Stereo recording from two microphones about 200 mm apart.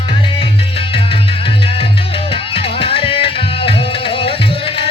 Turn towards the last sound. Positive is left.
turn(degrees=25)  # may be behind; listen again after turning